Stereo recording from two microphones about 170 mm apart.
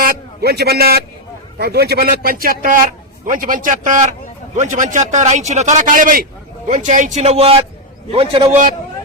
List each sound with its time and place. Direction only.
0.0 s a man's voice: 60° right (ahead or behind); by 8.4 s 30° right (ahead or behind)